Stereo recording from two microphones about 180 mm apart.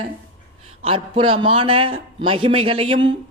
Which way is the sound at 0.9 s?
30° right (ahead or behind).